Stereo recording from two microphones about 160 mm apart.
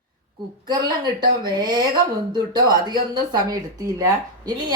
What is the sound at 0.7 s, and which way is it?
A woman's voice, 30° right (ahead or behind).